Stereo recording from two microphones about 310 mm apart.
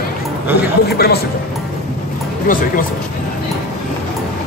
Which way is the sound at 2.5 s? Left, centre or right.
Left.